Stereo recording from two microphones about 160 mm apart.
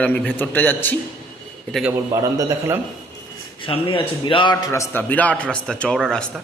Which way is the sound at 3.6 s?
35° left (ahead or behind).